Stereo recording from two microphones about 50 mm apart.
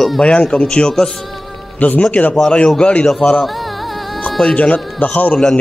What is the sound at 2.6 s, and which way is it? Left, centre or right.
Speech, centre.